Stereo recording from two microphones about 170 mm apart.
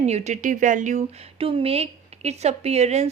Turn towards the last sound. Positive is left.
turn(degrees=-40)  # may be behind; listen again after turning